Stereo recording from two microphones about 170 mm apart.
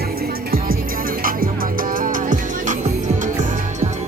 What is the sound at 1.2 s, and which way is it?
Music, 55° right (ahead or behind).